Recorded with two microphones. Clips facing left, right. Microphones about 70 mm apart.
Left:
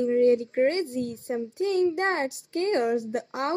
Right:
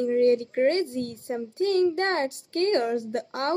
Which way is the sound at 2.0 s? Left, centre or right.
Centre.